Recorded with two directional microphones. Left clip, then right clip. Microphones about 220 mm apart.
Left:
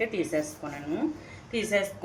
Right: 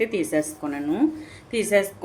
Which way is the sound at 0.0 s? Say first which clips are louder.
Right 5 dB; 40° right (ahead or behind).